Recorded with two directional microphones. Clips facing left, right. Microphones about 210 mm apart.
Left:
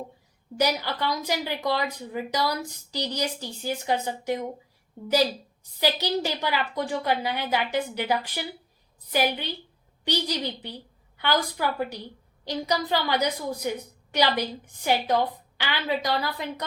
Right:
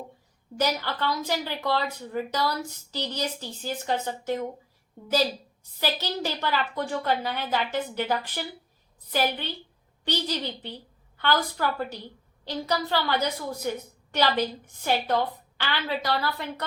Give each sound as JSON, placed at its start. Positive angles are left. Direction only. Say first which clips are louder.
{"t": 0.5, "sound": "a woman's voice", "louder": "left 2 dB", "side_deg": 15}
{"t": 5.8, "sound": "a woman's voice", "louder": "left 3 dB", "side_deg": 15}